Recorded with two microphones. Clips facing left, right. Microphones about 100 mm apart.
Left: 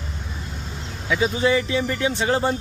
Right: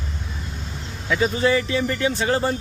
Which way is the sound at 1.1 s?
10° left (ahead or behind).